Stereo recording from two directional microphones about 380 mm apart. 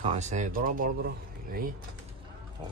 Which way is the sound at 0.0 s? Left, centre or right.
Centre.